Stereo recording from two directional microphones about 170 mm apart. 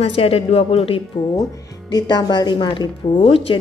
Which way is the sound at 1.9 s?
25° left (ahead or behind).